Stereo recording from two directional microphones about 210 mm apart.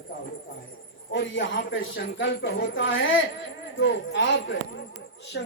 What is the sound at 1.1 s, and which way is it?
Speech, 65° left (ahead or behind).